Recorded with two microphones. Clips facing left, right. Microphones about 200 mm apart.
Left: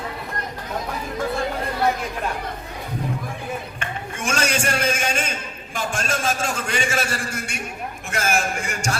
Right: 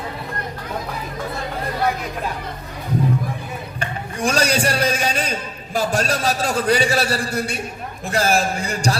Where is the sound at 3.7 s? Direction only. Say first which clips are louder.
Right 3 dB; 35° right (ahead or behind).